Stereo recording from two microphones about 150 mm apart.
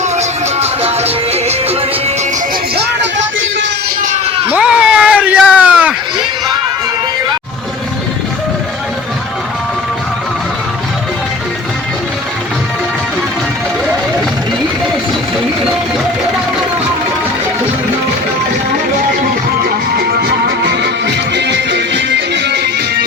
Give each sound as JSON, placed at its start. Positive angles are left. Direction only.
{"t": 0.0, "sound": "music", "side_deg": -45}
{"t": 4.4, "sound": "a sound", "side_deg": -10}
{"t": 20.0, "sound": "music", "side_deg": -90}
{"t": 22.5, "sound": "music", "side_deg": -90}